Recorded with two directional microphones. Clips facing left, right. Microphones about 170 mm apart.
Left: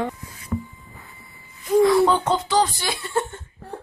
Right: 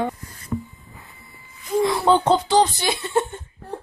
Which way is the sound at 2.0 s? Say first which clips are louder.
Right 3 dB; 25° right (ahead or behind).